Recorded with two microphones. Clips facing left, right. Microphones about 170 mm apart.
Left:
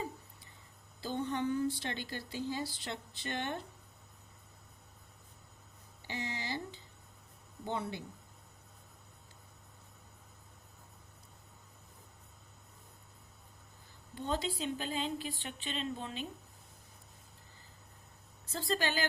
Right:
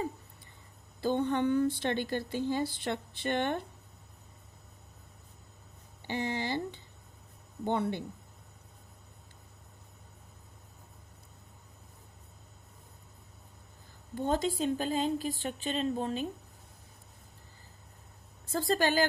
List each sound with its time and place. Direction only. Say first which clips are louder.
1.0 s a woman's voice: right 6 dB; 60° right (ahead or behind)
6.1 s a woman's voice: right 7 dB; 55° right (ahead or behind)
14.2 s speech: right 6 dB; 45° right (ahead or behind)
18.5 s speech: right 7 dB; 45° right (ahead or behind)